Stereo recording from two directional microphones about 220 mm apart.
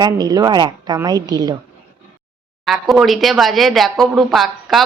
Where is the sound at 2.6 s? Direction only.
Centre (ahead or behind).